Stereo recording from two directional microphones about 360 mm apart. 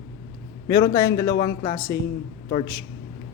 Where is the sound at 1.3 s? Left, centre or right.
Left.